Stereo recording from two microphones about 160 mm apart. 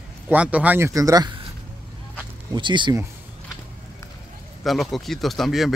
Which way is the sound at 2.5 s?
30° right (ahead or behind).